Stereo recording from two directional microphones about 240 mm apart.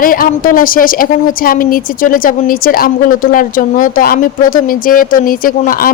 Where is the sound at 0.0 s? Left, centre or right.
Left.